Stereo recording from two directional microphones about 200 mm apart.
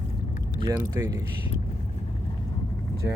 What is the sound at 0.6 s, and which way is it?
Speech, 20° right (ahead or behind).